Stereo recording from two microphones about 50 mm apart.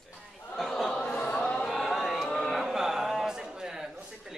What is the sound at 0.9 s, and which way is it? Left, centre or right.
Speech, centre.